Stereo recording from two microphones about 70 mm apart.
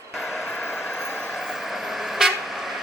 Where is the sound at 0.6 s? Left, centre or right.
Left.